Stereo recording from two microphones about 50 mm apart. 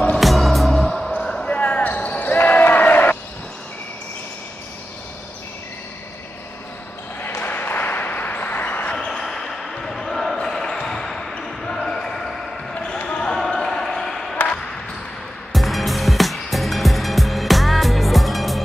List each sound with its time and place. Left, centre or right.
0.1 s music: centre
1.1 s basketball bounce: centre
2.3 s a sound: left
7.2 s a sound: left
8.9 s basketball bounce: centre
15.5 s music: centre